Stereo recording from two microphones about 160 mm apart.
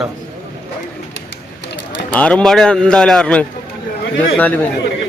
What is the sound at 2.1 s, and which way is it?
A man's voice, 10° left (ahead or behind).